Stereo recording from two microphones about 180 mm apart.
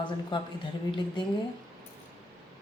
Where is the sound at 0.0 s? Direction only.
25° left (ahead or behind).